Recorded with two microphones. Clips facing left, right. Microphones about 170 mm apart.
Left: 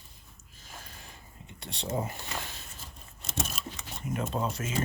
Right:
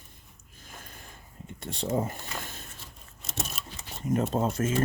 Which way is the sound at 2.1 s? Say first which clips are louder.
Right 1 dB; 50° right (ahead or behind).